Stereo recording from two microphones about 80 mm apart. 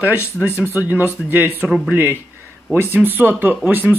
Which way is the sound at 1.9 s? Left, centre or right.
Right.